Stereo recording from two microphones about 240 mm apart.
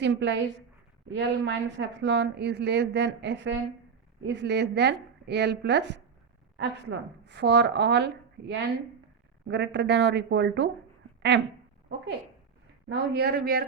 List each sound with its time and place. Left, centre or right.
0.0 s a woman's voice: right
12.9 s speech: right